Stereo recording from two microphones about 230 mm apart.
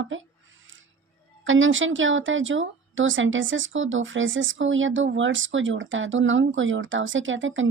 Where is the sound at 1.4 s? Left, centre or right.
Right.